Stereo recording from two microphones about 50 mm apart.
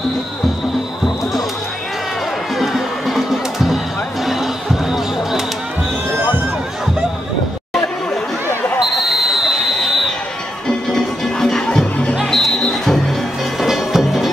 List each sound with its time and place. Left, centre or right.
2.5 s music: centre
4.3 s basketball bounce: centre
8.9 s basketball bounce: centre
10.9 s music: centre
13.6 s music: centre